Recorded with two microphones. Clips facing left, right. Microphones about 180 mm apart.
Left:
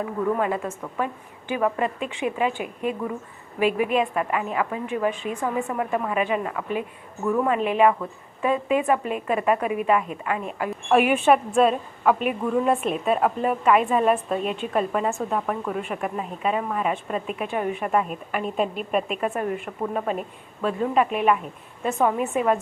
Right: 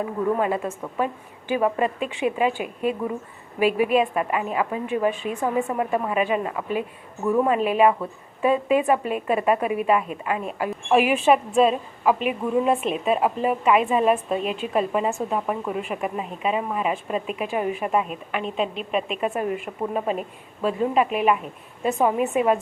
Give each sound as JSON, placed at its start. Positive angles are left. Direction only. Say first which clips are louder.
{"t": 0.0, "sound": "a woman's voice", "louder": "right 1 dB", "side_deg": -25}
{"t": 10.8, "sound": "a woman's voice", "louder": "even", "side_deg": 0}
{"t": 18.1, "sound": "a woman's voice", "louder": "left 1 dB", "side_deg": 5}
{"t": 18.7, "sound": "a woman's voice", "louder": "left 1 dB", "side_deg": 50}
{"t": 18.9, "sound": "a woman's voice", "louder": "left 1 dB", "side_deg": 5}
{"t": 19.2, "sound": "a woman's voice", "louder": "right 1 dB", "side_deg": -15}
{"t": 20.7, "sound": "a woman's voice", "louder": "right 1 dB", "side_deg": -5}